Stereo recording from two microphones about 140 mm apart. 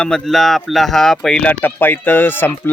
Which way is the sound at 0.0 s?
5° left (ahead or behind).